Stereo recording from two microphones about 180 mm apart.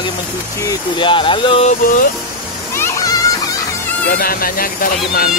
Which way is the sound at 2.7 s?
15° left (ahead or behind).